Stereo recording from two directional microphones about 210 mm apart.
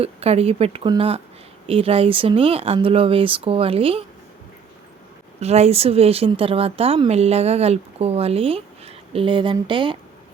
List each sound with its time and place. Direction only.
0.0 s a woman's voice: 30° right (ahead or behind)
5.4 s a woman's voice: 30° right (ahead or behind)